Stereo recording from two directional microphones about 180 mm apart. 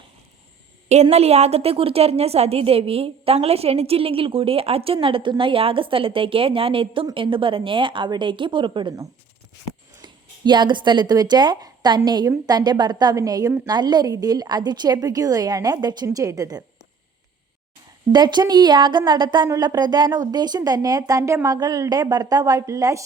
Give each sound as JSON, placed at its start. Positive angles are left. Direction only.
{"t": 0.9, "sound": "a woman's voice", "side_deg": -35}
{"t": 18.1, "sound": "a woman's voice", "side_deg": -25}